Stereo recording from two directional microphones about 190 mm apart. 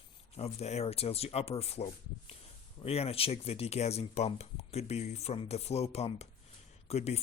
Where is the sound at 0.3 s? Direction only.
35° left (ahead or behind).